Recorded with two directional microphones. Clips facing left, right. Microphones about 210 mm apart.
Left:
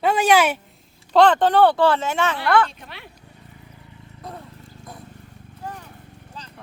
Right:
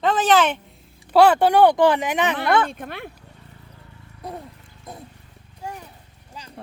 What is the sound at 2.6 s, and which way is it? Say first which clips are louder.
Speech: right 8 dB; 50° right (ahead or behind).